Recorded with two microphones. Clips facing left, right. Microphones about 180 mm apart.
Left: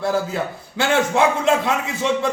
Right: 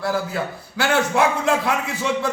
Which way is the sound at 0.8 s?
25° left (ahead or behind).